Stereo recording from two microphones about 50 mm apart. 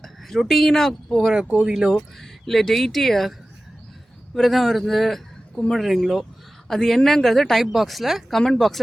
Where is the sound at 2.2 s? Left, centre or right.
Centre.